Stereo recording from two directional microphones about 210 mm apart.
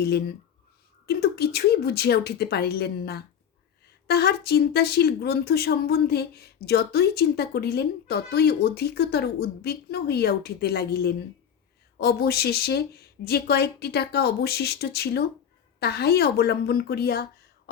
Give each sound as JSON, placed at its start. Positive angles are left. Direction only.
{"t": 0.0, "sound": "speech", "side_deg": 50}